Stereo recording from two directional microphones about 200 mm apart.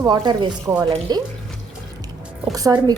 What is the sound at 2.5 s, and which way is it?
Speech, 20° right (ahead or behind).